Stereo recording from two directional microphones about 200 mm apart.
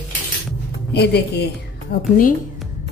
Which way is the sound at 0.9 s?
55° left (ahead or behind).